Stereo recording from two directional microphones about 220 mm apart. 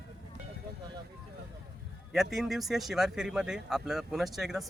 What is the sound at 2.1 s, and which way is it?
Speech, centre (ahead or behind).